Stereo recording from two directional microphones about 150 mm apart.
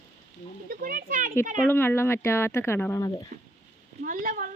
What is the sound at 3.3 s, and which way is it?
Speech, 50° right (ahead or behind).